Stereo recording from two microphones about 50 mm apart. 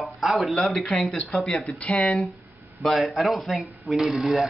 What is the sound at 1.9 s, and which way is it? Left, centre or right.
Speech, centre.